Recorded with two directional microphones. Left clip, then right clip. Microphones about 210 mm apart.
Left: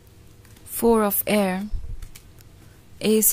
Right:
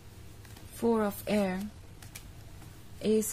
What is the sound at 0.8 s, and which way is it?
Speech, 45° left (ahead or behind).